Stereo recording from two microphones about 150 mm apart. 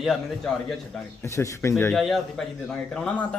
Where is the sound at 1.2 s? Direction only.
20° left (ahead or behind).